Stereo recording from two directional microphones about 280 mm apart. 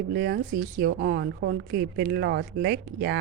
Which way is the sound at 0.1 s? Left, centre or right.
Right.